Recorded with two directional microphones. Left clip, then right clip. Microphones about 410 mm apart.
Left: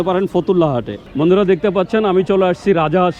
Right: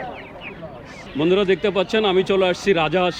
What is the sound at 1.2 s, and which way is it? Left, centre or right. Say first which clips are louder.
Speech: left 4 dB; centre.